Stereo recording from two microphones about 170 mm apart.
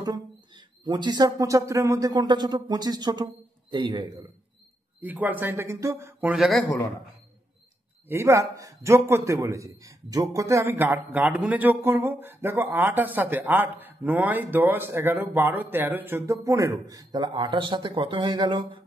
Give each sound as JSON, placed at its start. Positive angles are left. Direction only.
{"t": 0.0, "sound": "speech", "side_deg": -25}
{"t": 5.0, "sound": "a man's voice", "side_deg": -10}
{"t": 6.3, "sound": "speech", "side_deg": 0}
{"t": 8.1, "sound": "a man's voice", "side_deg": -15}